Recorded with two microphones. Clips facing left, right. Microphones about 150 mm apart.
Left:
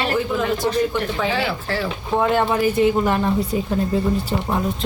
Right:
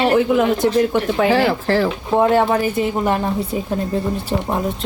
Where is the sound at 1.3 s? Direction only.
45° right (ahead or behind).